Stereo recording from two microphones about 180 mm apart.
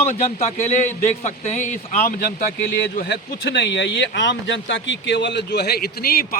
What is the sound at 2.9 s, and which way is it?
Speech, 60° left (ahead or behind).